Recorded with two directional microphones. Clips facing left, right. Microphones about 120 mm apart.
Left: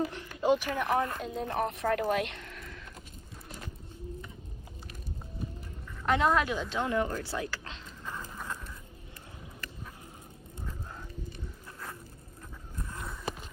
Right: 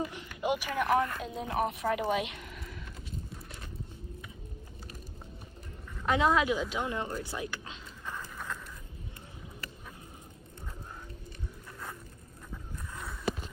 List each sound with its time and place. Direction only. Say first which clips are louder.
0.1 s speech: left 5 dB; 15° right (ahead or behind)
0.9 s speech: right 1 dB; 20° left (ahead or behind)
1.2 s a woman's voice: even; 5° right (ahead or behind)
2.4 s a sound: even; 5° right (ahead or behind)
6.0 s speech: even; 5° right (ahead or behind); by 7.8 s 20° right (ahead or behind)
12.9 s a sound: left 1 dB; centre (ahead or behind)